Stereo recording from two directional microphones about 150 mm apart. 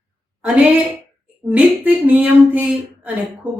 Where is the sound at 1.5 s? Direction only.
10° right (ahead or behind).